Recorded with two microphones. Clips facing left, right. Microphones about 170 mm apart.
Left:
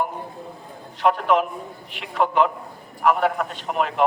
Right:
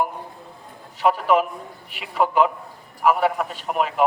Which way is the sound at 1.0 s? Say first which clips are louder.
Right 1 dB; 5° right (ahead or behind).